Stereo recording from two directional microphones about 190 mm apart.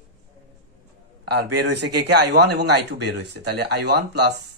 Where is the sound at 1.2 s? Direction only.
60° right (ahead or behind).